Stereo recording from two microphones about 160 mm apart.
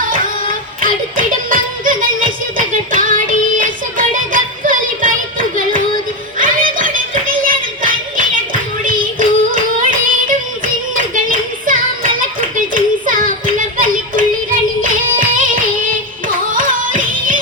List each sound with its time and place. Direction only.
0.0 s music: 60° right (ahead or behind)
10.9 s a sound: 55° right (ahead or behind)
14.8 s music: 60° right (ahead or behind)
16.5 s music: 60° right (ahead or behind)